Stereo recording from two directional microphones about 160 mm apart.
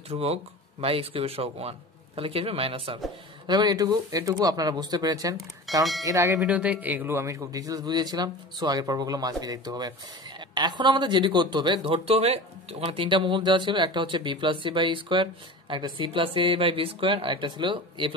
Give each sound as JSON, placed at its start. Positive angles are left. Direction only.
{"t": 0.1, "sound": "a man's voice", "side_deg": -40}
{"t": 6.4, "sound": "a man's voice", "side_deg": -10}